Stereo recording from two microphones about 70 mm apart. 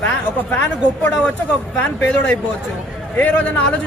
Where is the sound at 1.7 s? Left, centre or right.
Left.